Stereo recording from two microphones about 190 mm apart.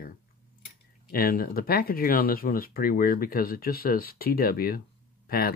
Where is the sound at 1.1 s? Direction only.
50° left (ahead or behind).